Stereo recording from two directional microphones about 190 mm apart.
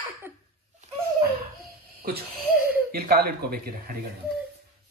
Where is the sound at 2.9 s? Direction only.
55° right (ahead or behind).